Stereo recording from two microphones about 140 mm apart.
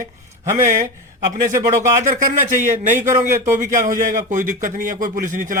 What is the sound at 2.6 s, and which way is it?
Speech, 60° right (ahead or behind).